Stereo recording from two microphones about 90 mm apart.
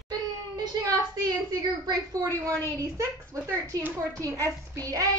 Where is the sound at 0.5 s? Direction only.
45° right (ahead or behind).